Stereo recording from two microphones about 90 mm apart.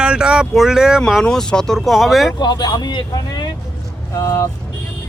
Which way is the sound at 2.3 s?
50° left (ahead or behind).